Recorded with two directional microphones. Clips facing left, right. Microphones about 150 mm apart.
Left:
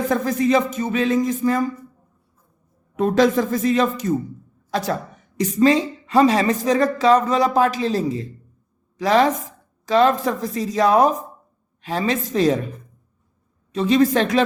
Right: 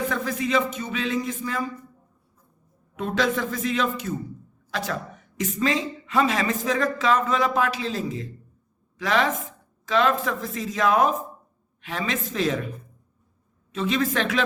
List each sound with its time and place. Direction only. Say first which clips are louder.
0.1 s speech: left 7 dB; 40° left (ahead or behind)
2.9 s a woman's voice: left 8 dB; 40° left (ahead or behind)
5.4 s a woman's voice: left 8 dB; 35° left (ahead or behind)
13.7 s a woman's voice: left 8 dB; 35° left (ahead or behind)